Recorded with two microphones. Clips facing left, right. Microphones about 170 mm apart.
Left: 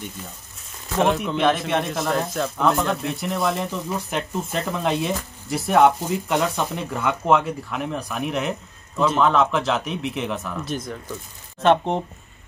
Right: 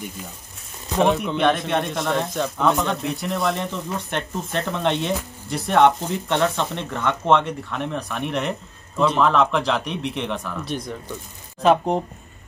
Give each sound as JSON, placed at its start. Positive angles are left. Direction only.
{"t": 0.9, "sound": "speech", "side_deg": 0}